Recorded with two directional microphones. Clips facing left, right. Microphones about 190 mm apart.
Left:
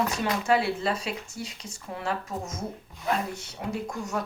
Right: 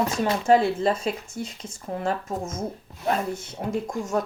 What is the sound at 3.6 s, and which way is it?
Speech, 40° right (ahead or behind).